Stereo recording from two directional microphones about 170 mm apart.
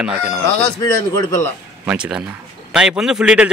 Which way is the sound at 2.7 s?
5° right (ahead or behind).